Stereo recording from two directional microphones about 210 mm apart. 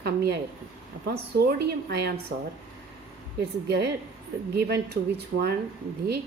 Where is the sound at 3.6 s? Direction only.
50° right (ahead or behind).